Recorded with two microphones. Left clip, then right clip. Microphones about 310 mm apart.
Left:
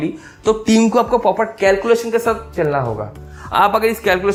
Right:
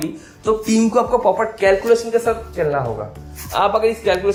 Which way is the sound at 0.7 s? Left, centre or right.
Left.